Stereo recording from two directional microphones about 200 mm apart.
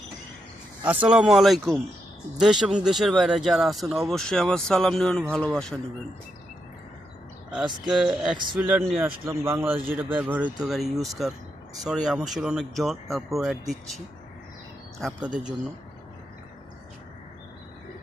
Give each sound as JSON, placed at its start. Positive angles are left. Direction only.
{"t": 1.0, "sound": "speech", "side_deg": -5}
{"t": 7.9, "sound": "speech", "side_deg": -5}